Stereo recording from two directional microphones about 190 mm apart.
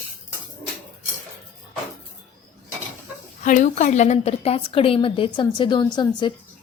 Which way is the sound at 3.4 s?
40° left (ahead or behind).